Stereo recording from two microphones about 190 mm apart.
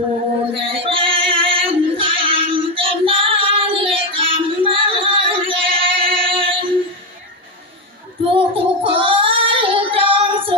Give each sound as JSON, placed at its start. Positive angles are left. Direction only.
{"t": 0.6, "sound": "music", "side_deg": -30}
{"t": 8.3, "sound": "child singing", "side_deg": -30}